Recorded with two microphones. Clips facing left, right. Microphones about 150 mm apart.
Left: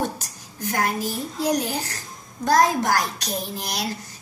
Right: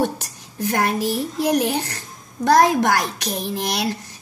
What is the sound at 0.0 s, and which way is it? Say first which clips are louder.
A woman's voice: right 5 dB; 65° right (ahead or behind).